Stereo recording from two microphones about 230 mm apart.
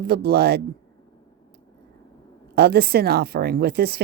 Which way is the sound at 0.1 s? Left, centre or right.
Right.